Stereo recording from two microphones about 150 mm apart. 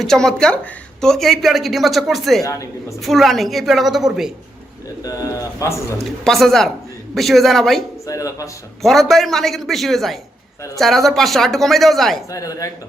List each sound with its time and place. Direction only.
0.0 s speech: 5° left (ahead or behind)
2.4 s speech: 20° left (ahead or behind)
3.0 s speech: centre (ahead or behind)
5.0 s speech: 25° left (ahead or behind)
6.2 s speech: centre (ahead or behind)
8.0 s speech: 20° left (ahead or behind)
8.8 s speech: centre (ahead or behind)
12.3 s speech: 20° left (ahead or behind)